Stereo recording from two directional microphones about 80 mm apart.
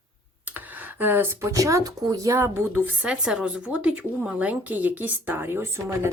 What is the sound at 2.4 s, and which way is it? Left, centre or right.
A woman's voice, right.